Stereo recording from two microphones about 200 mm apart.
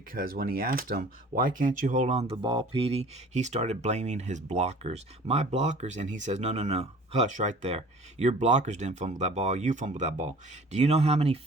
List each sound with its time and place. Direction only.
0.1 s speech: 45° right (ahead or behind); by 11.3 s 30° right (ahead or behind)